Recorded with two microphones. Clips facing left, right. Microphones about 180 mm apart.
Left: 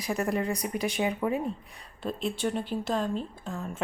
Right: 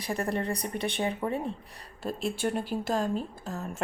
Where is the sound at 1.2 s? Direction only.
Centre (ahead or behind).